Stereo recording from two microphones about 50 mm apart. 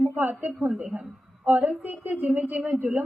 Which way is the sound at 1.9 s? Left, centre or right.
Right.